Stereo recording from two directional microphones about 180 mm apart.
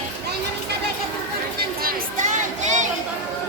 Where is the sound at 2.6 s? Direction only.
40° right (ahead or behind).